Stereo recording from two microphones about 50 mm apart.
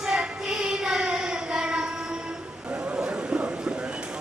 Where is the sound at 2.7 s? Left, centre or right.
Right.